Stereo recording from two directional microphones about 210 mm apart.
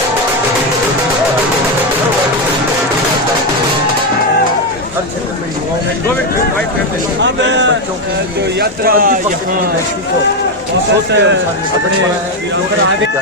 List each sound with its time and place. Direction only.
7.2 s speech: 55° right (ahead or behind)
8.5 s speech: 45° right (ahead or behind)
11.1 s speech: 55° right (ahead or behind)